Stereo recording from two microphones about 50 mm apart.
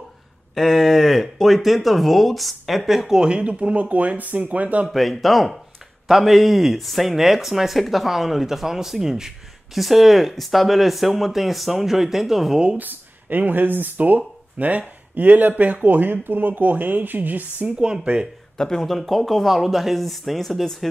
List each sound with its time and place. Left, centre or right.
0.6 s speech: centre; by 4.8 s right
4.8 s speech: centre
12.7 s speech: right
17.8 s speech: centre
18.6 s speech: centre